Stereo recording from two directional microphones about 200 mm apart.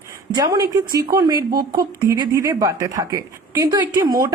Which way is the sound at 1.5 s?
50° right (ahead or behind).